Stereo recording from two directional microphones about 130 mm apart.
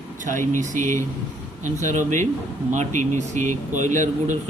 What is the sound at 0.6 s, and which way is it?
Speech, 80° right.